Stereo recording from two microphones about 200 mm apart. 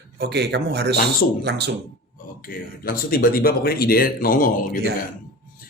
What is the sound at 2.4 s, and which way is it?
Speech, 45° left (ahead or behind).